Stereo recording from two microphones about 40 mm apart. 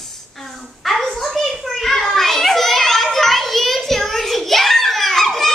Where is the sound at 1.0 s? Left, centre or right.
Centre.